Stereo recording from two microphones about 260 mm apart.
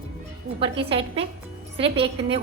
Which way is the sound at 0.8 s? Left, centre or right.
Right.